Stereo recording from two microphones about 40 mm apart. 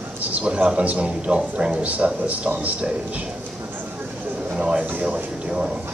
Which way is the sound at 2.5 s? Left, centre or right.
Right.